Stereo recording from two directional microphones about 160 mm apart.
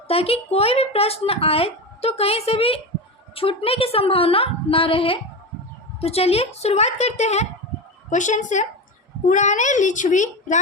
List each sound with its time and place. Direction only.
0.1 s a child's voice: 40° left (ahead or behind)